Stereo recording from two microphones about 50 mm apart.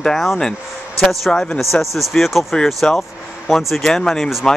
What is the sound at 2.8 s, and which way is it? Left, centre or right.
Speech, centre.